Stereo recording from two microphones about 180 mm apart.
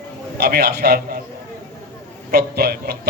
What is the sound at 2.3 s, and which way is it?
Speech, 60° right (ahead or behind).